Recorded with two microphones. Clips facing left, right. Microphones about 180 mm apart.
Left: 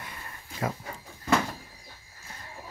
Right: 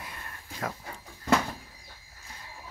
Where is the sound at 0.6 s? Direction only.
10° left (ahead or behind).